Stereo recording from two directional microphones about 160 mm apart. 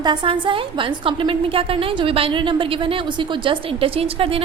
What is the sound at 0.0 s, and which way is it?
A woman's voice, 30° right (ahead or behind).